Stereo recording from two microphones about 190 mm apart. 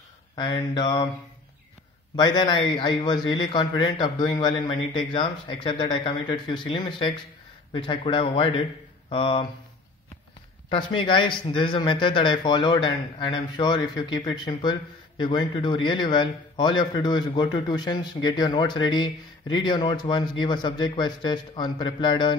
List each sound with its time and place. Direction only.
0.4 s speech: 25° left (ahead or behind)
2.1 s speech: 20° left (ahead or behind)
10.7 s speech: 25° left (ahead or behind)